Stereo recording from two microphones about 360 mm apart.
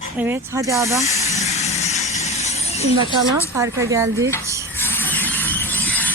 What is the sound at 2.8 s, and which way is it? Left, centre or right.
Speech, right.